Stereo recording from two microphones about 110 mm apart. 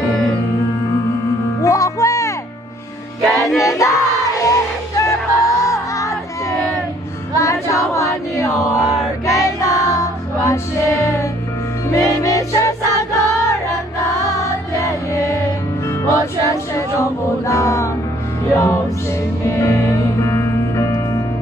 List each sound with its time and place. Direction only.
1.6 s music: 30° left (ahead or behind)
3.2 s music: centre (ahead or behind)
3.5 s music: 30° left (ahead or behind)